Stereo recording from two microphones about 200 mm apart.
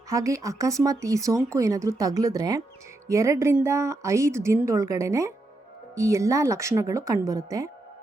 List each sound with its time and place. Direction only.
0.1 s speech: 15° right (ahead or behind)